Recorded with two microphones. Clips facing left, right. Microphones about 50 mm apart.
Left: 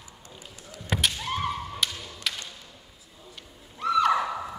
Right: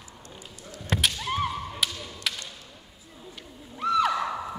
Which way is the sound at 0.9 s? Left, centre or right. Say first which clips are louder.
Right 1 dB; centre.